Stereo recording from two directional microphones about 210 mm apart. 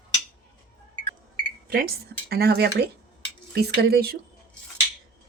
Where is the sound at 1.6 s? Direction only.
45° right (ahead or behind).